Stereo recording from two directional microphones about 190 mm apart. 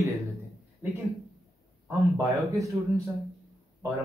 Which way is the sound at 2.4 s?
15° right (ahead or behind).